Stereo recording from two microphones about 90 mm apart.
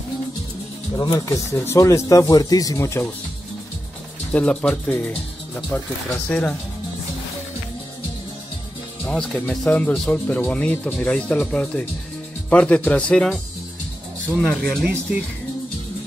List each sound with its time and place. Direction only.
0.9 s speech: 45° left (ahead or behind)
4.3 s speech: 15° left (ahead or behind)
9.0 s speech: 10° left (ahead or behind)
14.5 s speech: 5° left (ahead or behind)
14.9 s speech: 15° right (ahead or behind)